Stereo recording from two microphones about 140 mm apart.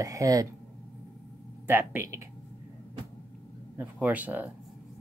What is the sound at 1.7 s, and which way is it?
Speech, 15° right (ahead or behind).